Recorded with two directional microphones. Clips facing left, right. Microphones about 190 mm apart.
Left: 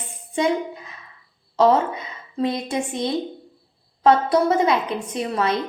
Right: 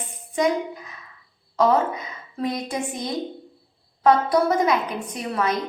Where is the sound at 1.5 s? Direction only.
25° left (ahead or behind).